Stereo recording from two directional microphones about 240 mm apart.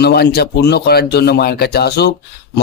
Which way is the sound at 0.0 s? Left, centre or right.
Left.